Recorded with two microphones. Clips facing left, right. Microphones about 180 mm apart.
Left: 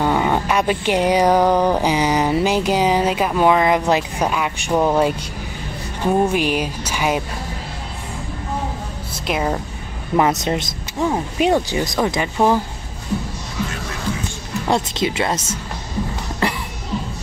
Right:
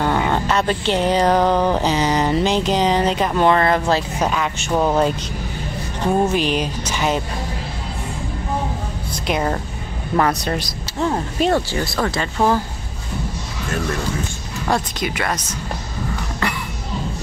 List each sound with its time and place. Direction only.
0.0 s speech: 10° left (ahead or behind)
9.3 s speech: 5° left (ahead or behind)
10.1 s speech: 20° left (ahead or behind)
11.1 s speech: 10° left (ahead or behind)
14.7 s speech: 25° left (ahead or behind)